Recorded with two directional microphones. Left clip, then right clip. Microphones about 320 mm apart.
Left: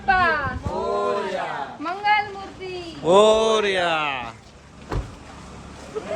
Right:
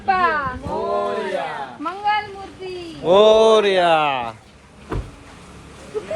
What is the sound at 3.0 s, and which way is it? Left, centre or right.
Speech, centre.